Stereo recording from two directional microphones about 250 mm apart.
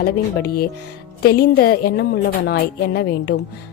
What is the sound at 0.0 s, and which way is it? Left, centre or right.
Speech, left.